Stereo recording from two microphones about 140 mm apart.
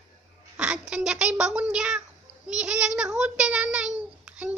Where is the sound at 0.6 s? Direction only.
5° right (ahead or behind).